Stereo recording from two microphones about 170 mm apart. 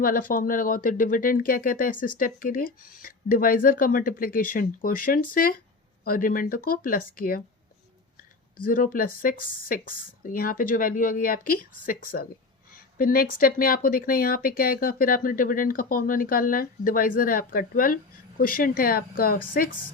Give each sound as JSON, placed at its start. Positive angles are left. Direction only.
{"t": 0.0, "sound": "speech", "side_deg": 55}
{"t": 8.6, "sound": "speech", "side_deg": 55}